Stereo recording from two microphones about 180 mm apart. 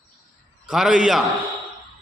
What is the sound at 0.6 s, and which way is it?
Speech, 5° right (ahead or behind).